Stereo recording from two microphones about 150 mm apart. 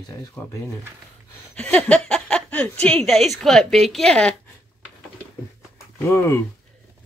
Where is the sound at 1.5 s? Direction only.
10° left (ahead or behind).